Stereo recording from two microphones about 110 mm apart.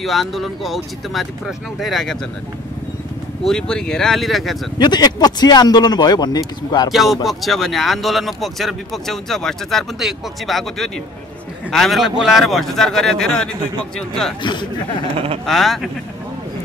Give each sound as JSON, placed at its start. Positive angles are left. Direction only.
{"t": 0.0, "sound": "speech", "side_deg": 0}
{"t": 3.4, "sound": "speech", "side_deg": 5}
{"t": 4.7, "sound": "speech", "side_deg": 40}
{"t": 6.9, "sound": "speech", "side_deg": 0}
{"t": 14.4, "sound": "speech", "side_deg": 45}
{"t": 15.4, "sound": "speech", "side_deg": 0}